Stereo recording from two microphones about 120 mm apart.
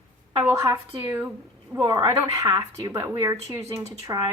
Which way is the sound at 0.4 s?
25° right (ahead or behind).